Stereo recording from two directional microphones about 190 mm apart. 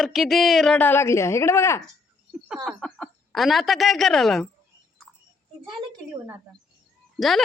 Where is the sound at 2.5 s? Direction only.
Centre (ahead or behind).